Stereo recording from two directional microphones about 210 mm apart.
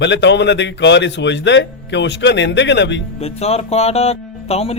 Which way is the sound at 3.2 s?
30° left (ahead or behind).